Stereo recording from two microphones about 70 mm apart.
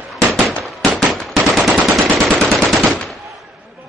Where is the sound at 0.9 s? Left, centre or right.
Centre.